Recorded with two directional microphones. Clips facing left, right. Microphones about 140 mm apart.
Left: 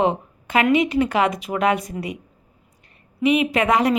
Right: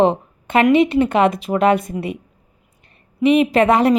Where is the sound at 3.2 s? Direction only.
30° right (ahead or behind).